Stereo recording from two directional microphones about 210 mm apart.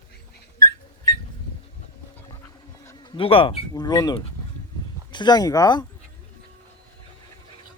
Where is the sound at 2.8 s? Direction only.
20° left (ahead or behind).